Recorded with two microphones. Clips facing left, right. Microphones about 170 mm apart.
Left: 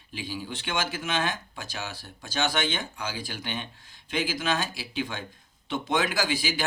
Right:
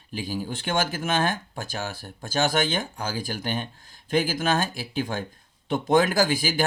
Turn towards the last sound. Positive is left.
turn(degrees=-50)  # may be behind; listen again after turning